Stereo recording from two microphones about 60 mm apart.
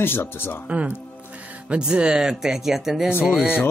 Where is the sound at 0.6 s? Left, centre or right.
Right; by 3.0 s centre.